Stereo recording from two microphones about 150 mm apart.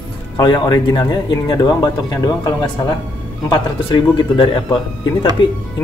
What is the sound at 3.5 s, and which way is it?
Speech, 30° left (ahead or behind).